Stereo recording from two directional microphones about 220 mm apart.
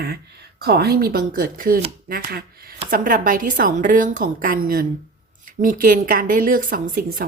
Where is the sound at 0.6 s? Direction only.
45° right (ahead or behind).